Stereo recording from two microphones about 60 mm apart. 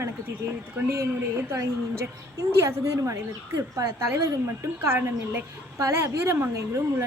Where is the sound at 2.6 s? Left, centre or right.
Right.